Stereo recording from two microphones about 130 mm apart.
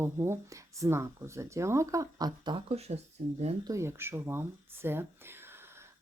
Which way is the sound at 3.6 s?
20° right (ahead or behind).